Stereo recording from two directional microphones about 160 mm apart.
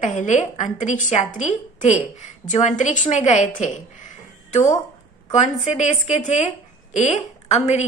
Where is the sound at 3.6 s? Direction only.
50° left (ahead or behind).